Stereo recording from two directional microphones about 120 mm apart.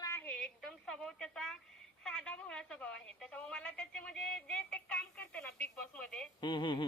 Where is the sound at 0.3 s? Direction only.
5° left (ahead or behind).